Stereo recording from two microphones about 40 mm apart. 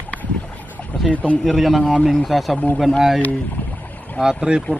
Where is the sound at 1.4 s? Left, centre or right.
Centre.